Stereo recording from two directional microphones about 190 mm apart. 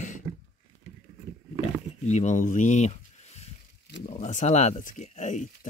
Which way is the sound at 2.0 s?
40° left (ahead or behind).